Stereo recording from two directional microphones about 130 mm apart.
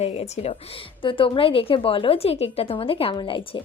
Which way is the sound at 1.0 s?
40° left (ahead or behind).